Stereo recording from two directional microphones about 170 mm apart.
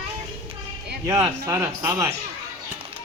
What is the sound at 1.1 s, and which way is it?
A man's voice, 15° right (ahead or behind).